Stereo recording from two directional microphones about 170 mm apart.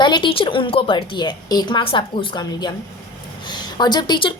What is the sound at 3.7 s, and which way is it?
Speech, 25° left (ahead or behind).